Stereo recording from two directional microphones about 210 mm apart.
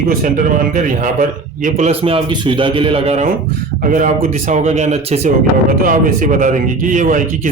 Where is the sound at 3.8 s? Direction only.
40° right (ahead or behind).